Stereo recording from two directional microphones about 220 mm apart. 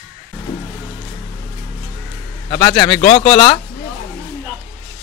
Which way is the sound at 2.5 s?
20° left (ahead or behind).